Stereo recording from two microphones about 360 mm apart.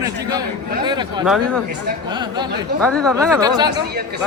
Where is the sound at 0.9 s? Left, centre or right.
Centre.